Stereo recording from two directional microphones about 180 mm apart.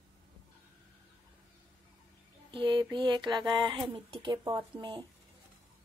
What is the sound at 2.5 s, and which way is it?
Speech, 25° right (ahead or behind).